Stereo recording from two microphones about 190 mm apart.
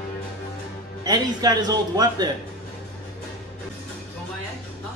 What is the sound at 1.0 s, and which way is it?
A man's voice, 20° right (ahead or behind).